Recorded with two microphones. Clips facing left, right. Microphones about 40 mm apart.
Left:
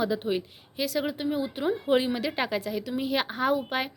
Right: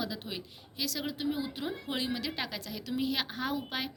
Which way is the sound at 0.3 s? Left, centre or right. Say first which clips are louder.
Left 12 dB; left.